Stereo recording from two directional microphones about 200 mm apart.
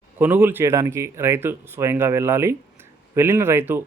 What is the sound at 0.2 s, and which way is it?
Speech, 10° right (ahead or behind).